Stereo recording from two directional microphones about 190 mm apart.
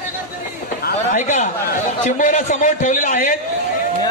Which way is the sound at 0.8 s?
40° left (ahead or behind).